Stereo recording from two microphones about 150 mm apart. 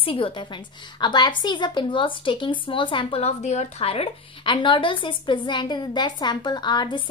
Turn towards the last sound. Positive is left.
turn(degrees=30)  # may be behind; listen again after turning